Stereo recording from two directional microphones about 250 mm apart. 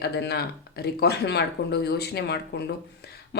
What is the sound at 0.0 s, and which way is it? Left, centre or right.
Speech, left.